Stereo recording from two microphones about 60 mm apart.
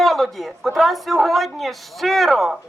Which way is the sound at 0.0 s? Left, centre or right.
Centre.